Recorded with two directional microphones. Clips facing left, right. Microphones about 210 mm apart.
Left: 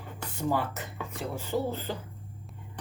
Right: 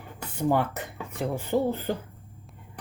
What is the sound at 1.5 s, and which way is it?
Speech, 55° right (ahead or behind).